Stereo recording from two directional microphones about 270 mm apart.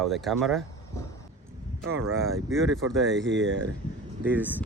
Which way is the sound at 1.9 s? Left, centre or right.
Right.